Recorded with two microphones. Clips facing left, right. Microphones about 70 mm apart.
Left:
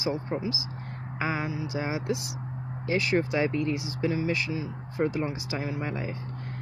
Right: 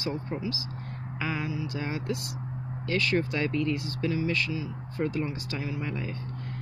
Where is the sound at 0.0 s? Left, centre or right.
Centre.